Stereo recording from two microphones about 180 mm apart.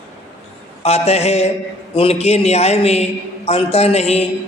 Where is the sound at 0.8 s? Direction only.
35° left (ahead or behind).